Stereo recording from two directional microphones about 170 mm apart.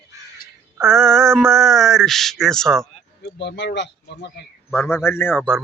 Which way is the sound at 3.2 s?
90° left.